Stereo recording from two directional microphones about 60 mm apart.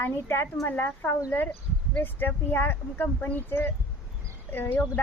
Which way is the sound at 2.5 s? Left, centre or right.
Left.